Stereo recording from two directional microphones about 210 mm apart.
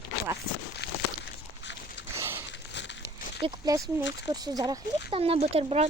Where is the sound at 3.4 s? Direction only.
15° right (ahead or behind).